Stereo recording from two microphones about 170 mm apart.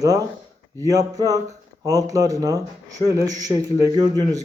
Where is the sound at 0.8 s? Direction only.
20° right (ahead or behind).